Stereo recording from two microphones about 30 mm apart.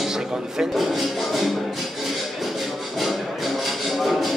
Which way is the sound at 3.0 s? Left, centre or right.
Centre.